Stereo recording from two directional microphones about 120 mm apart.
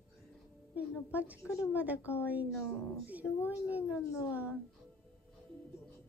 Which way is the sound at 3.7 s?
15° right (ahead or behind).